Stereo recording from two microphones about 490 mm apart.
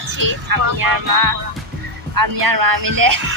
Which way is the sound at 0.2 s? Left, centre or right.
Right.